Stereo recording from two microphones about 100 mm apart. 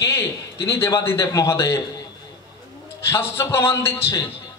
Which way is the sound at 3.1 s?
25° left (ahead or behind).